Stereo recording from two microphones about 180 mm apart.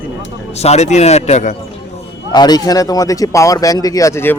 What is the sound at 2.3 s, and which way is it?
Speech, 20° left (ahead or behind).